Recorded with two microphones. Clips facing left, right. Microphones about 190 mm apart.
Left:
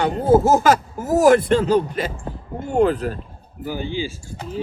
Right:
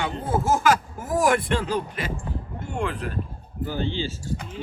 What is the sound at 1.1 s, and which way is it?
Speech, 40° left (ahead or behind).